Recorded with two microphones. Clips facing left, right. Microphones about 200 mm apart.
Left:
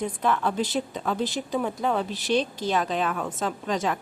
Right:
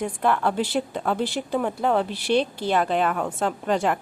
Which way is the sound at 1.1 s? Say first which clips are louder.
Right 2 dB; 10° right (ahead or behind).